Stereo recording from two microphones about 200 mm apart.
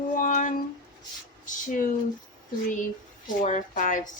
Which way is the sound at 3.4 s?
35° left (ahead or behind).